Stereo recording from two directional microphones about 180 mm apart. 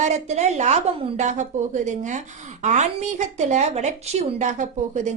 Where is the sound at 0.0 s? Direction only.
40° right (ahead or behind).